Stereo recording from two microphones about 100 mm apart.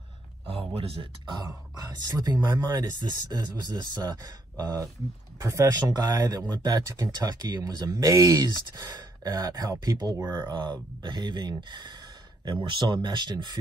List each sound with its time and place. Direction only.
0.7 s speech: 70° right (ahead or behind)
1.9 s speech: 45° right (ahead or behind)